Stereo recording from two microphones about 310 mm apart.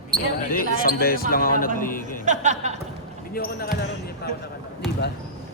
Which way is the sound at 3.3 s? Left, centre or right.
Left.